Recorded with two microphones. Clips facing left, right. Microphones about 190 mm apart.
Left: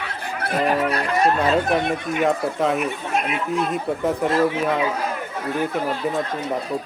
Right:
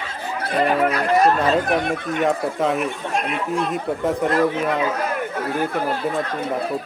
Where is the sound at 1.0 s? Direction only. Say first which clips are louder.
Right 4 dB; 35° right (ahead or behind).